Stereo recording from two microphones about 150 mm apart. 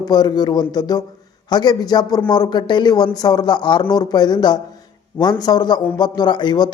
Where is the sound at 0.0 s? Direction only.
25° left (ahead or behind).